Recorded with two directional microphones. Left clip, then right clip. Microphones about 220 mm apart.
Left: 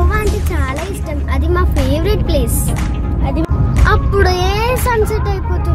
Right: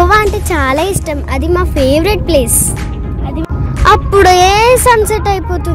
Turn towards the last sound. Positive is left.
turn(degrees=-35)  # may be behind; listen again after turning